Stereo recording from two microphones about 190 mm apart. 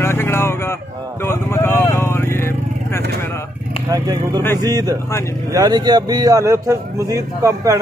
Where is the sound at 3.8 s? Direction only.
20° right (ahead or behind).